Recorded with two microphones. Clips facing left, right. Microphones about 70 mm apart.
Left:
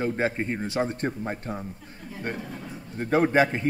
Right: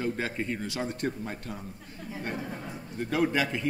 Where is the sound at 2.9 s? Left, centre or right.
Left.